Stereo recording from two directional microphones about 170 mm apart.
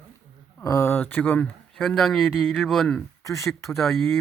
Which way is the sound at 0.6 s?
20° left (ahead or behind).